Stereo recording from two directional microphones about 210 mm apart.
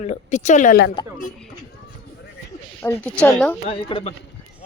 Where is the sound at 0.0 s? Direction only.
35° left (ahead or behind).